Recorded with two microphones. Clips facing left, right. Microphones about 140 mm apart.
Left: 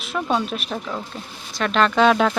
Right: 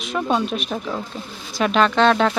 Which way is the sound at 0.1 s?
Centre (ahead or behind).